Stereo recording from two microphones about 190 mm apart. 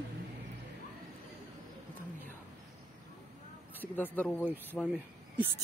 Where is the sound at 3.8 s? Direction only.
10° left (ahead or behind).